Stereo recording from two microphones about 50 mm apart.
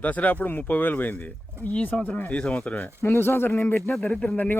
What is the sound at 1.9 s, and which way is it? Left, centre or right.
Speech, left.